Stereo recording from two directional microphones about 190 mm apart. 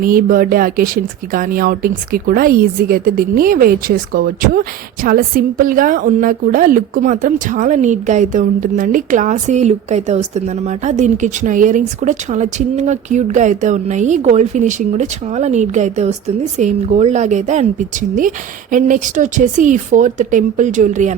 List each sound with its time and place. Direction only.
0.0 s a woman's voice: 50° right (ahead or behind)